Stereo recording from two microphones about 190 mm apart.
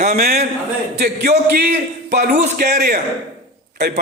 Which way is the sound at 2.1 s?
45° right (ahead or behind).